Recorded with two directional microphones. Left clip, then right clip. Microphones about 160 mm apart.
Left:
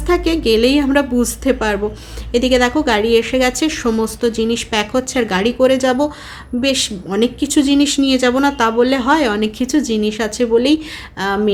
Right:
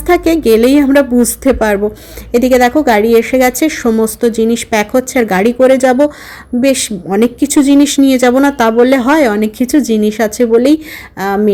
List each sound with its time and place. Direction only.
0.1 s speech: 35° right (ahead or behind)